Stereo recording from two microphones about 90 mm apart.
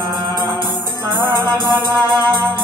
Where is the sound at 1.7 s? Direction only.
55° right (ahead or behind).